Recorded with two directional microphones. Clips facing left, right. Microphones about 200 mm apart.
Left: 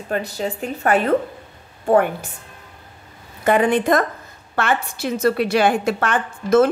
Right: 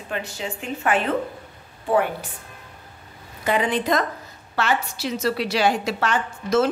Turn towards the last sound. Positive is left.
turn(degrees=55)  # may be behind; listen again after turning